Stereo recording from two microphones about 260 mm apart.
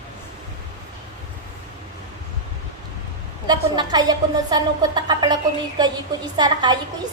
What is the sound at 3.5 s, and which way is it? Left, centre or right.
A woman's voice, centre.